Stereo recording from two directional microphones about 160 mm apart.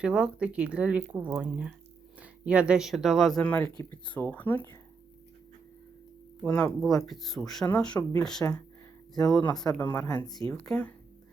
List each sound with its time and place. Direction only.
0.0 s speech: 5° right (ahead or behind); by 4.8 s 15° left (ahead or behind)
6.4 s speech: 5° left (ahead or behind)
8.4 s speech: 25° left (ahead or behind)
9.7 s speech: 15° left (ahead or behind)
10.2 s speech: 25° left (ahead or behind)
10.5 s speech: 5° left (ahead or behind)